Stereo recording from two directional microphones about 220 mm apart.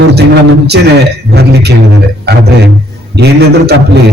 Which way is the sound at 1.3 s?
50° right (ahead or behind).